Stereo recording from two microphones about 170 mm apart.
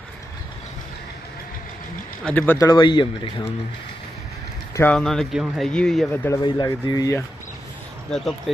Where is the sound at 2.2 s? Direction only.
10° left (ahead or behind).